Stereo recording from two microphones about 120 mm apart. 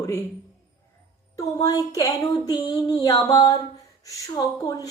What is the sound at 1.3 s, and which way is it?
A woman's voice, 30° left (ahead or behind).